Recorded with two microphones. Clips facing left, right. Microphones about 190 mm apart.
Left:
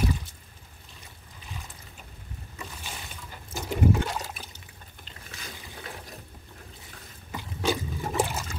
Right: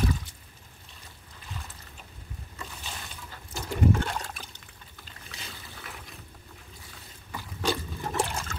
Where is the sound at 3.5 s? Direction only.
10° left (ahead or behind).